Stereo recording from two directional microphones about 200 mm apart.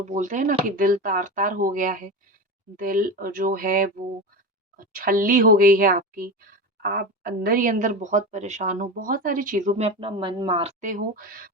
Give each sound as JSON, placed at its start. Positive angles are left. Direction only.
{"t": 0.0, "sound": "speech", "side_deg": -40}